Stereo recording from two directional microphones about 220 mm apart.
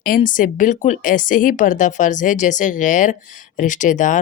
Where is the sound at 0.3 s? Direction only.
35° left (ahead or behind).